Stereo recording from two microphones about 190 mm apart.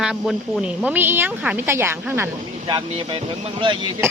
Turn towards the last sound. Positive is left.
turn(degrees=-25)  # may be behind; listen again after turning